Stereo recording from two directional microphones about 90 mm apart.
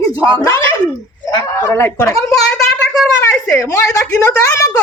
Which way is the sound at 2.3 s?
10° left (ahead or behind).